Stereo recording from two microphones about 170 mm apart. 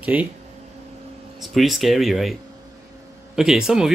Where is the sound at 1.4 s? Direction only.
Centre (ahead or behind).